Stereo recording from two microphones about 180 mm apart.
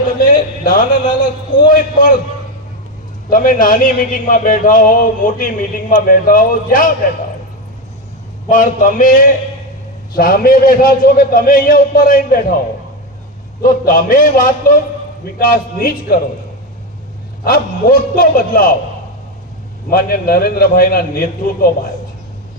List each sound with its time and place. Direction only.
0.6 s a man's voice: 45° left (ahead or behind)
3.2 s a man's voice: 50° left (ahead or behind)
8.4 s a man's voice: 45° left (ahead or behind)
13.6 s a man's voice: 50° left (ahead or behind)
17.4 s a man's voice: 55° left (ahead or behind)
19.9 s a man's voice: 55° left (ahead or behind)